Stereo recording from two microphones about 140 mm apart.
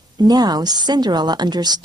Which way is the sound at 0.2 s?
30° right (ahead or behind).